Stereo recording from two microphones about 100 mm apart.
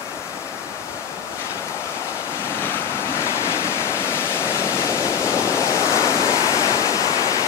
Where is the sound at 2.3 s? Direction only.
25° left (ahead or behind).